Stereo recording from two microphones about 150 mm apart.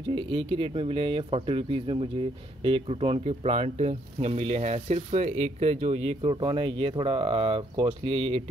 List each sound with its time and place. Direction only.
0.1 s speech: 40° right (ahead or behind)